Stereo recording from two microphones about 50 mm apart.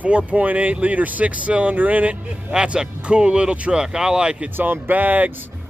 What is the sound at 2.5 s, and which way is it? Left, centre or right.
Speech, centre.